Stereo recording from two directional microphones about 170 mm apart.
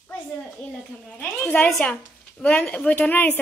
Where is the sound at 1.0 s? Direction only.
5° left (ahead or behind).